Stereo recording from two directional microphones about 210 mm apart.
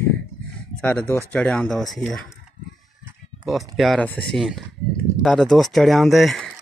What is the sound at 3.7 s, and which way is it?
Speech, centre (ahead or behind).